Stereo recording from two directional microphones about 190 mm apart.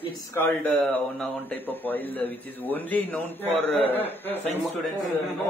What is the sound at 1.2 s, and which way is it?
A man's voice, 10° left (ahead or behind).